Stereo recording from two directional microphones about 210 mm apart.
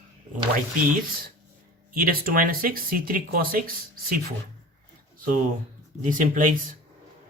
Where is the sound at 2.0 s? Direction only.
45° right (ahead or behind).